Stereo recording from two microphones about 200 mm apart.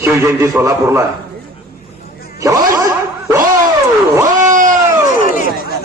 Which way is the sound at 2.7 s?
15° right (ahead or behind).